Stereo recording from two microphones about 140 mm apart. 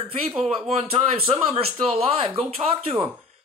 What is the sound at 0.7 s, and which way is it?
Speech, 50° right (ahead or behind).